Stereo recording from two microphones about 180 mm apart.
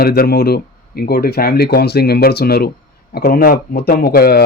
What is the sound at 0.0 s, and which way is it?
Speech, 60° left (ahead or behind).